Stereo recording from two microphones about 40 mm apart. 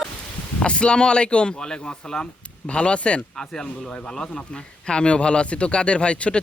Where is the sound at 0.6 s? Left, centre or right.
Left.